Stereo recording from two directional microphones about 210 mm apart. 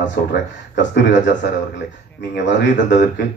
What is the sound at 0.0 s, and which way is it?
A man's voice, 55° left (ahead or behind).